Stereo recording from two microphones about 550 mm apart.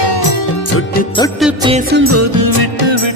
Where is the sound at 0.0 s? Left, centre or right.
Left.